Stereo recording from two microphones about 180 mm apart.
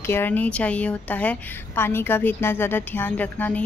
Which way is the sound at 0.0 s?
10° left (ahead or behind).